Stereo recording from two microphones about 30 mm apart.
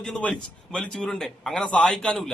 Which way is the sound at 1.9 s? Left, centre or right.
Left.